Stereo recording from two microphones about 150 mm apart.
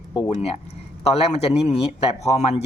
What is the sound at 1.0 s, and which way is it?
Speech, 45° left (ahead or behind).